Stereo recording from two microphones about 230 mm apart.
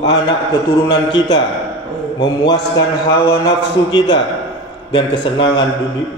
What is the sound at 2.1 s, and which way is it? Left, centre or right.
A man's voice, centre.